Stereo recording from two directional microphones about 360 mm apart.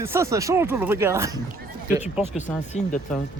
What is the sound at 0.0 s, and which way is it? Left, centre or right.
Speech, centre.